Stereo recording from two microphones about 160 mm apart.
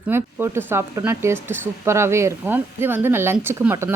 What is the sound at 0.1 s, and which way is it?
Speech, 15° right (ahead or behind).